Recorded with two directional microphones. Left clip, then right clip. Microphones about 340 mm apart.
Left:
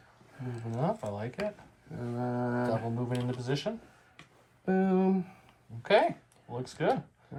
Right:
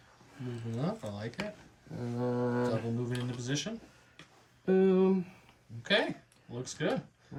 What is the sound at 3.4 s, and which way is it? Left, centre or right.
Speech, centre.